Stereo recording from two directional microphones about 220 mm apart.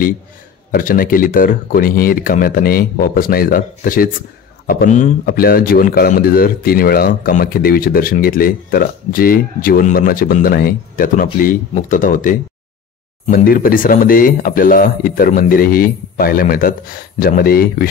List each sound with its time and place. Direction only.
0.7 s a man's voice: 40° left (ahead or behind)